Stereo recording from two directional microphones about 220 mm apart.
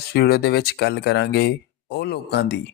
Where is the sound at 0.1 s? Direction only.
45° left (ahead or behind).